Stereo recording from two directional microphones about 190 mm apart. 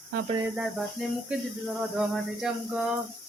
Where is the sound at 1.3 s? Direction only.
5° right (ahead or behind).